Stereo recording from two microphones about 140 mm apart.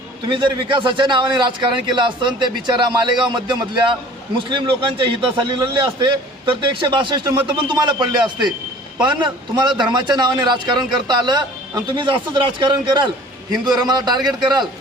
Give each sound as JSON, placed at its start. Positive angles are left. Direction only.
{"t": 0.3, "sound": "a man's voice", "side_deg": -35}